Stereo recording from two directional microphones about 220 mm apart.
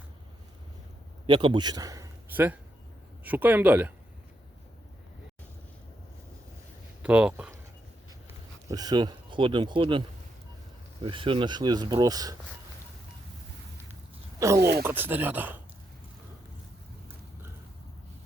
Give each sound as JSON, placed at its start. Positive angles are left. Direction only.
{"t": 1.3, "sound": "speech", "side_deg": -20}
{"t": 7.0, "sound": "speech", "side_deg": -5}
{"t": 8.6, "sound": "speech", "side_deg": -15}
{"t": 11.0, "sound": "speech", "side_deg": -25}
{"t": 14.3, "sound": "speech", "side_deg": -15}